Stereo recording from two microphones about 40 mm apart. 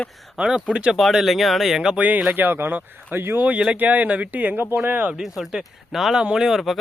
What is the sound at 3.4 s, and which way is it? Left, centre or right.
Speech, right.